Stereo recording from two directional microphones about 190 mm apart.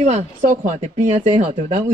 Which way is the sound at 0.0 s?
40° right (ahead or behind).